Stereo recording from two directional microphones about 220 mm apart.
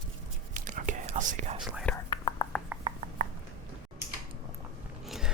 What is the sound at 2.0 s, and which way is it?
Whispering, 20° left (ahead or behind).